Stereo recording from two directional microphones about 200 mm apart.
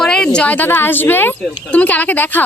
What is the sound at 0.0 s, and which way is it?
Speech, 5° left (ahead or behind).